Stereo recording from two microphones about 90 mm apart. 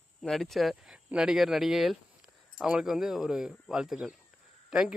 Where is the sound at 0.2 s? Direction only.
5° left (ahead or behind).